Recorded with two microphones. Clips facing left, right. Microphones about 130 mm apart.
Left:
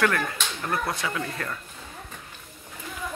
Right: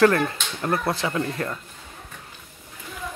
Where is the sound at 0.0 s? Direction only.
30° right (ahead or behind).